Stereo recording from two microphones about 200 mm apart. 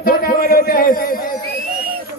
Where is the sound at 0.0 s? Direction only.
50° left (ahead or behind).